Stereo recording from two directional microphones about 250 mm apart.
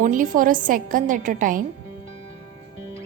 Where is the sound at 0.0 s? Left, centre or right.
Right.